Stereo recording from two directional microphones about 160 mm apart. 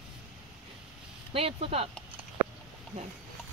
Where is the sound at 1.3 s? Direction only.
35° right (ahead or behind).